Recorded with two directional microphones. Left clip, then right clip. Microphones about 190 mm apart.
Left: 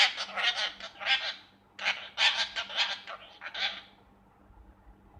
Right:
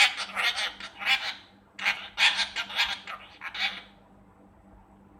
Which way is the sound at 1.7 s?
10° left (ahead or behind).